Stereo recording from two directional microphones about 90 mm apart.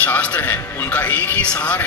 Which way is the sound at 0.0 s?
20° left (ahead or behind).